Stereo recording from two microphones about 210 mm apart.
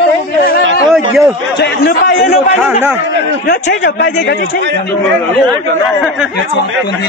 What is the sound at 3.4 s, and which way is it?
Speech, 50° left (ahead or behind).